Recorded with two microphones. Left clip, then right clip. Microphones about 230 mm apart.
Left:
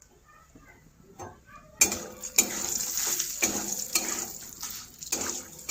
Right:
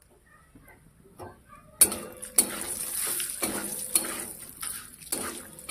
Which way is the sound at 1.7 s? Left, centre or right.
Centre.